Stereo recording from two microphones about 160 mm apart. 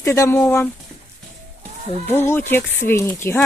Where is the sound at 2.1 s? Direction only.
15° left (ahead or behind).